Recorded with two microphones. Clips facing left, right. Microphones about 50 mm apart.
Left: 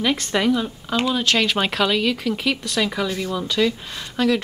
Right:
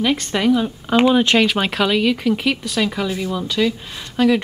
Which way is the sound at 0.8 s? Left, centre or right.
Right.